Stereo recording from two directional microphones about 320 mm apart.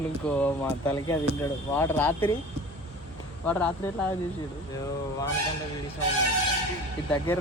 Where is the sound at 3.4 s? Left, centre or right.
Centre.